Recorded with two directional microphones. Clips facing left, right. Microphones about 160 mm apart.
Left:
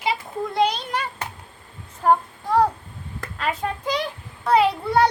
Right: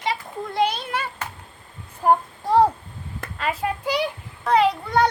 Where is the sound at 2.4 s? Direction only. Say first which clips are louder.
Right 2 dB; 30° right (ahead or behind).